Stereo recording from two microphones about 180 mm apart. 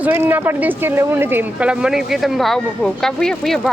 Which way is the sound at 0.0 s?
10° right (ahead or behind).